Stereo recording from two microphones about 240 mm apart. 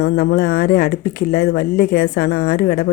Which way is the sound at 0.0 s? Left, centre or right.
Left.